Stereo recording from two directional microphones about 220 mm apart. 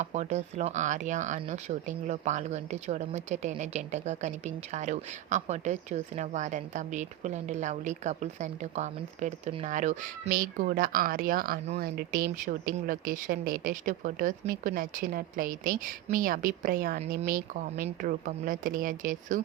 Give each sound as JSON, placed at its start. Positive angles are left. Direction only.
{"t": 0.0, "sound": "speech", "side_deg": -30}